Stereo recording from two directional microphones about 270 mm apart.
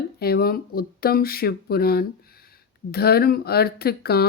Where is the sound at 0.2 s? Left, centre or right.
Left.